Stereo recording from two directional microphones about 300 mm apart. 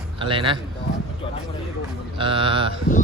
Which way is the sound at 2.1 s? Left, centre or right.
Centre.